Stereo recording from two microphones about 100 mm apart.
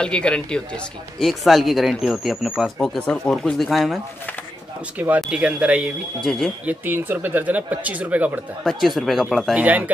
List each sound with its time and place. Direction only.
0.0 s speech: 10° left (ahead or behind)
1.2 s speech: centre (ahead or behind)
4.9 s speech: 15° right (ahead or behind)
6.2 s speech: 5° left (ahead or behind)
6.6 s speech: 15° right (ahead or behind)
8.6 s speech: centre (ahead or behind)
9.6 s speech: 15° right (ahead or behind)